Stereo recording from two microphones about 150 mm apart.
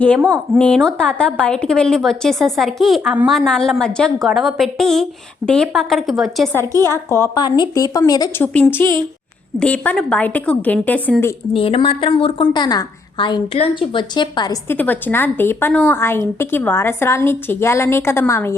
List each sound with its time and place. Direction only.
0.3 s a woman's voice: 5° left (ahead or behind)
6.7 s a woman's voice: 20° right (ahead or behind)
7.1 s a woman's voice: 25° left (ahead or behind)
11.5 s a woman's voice: 35° left (ahead or behind)
14.7 s a woman's voice: 10° left (ahead or behind)